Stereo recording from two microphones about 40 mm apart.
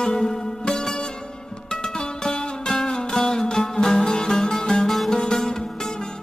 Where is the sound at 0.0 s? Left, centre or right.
Centre.